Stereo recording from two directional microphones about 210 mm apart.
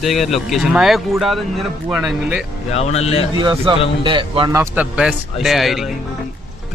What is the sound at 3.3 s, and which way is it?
Speech, 25° right (ahead or behind).